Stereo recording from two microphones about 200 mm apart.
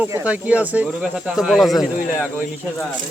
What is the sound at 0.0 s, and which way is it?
Speech, 10° right (ahead or behind).